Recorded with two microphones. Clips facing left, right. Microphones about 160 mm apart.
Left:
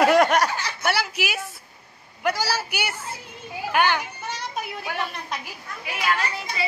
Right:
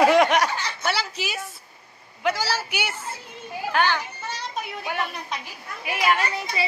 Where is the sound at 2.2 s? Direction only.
10° left (ahead or behind).